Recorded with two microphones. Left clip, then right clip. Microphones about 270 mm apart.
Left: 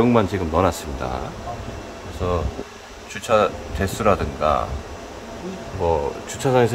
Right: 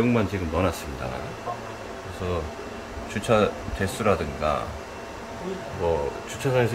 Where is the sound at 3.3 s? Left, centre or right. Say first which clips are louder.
Left 4 dB; centre.